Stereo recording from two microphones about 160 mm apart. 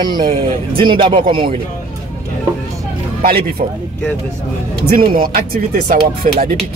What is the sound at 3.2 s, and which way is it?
Speech, 65° right (ahead or behind).